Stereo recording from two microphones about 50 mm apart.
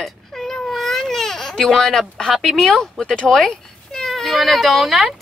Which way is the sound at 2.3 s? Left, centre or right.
Centre.